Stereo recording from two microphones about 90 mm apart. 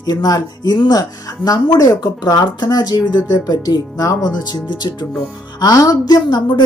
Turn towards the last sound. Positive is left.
turn(degrees=60)  # may be behind; listen again after turning